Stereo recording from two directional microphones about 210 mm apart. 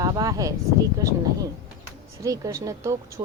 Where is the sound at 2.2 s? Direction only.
15° right (ahead or behind).